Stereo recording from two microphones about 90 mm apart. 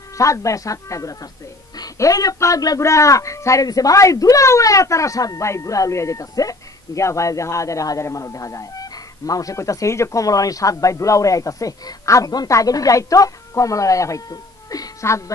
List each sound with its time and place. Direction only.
0.2 s speech: 35° left (ahead or behind)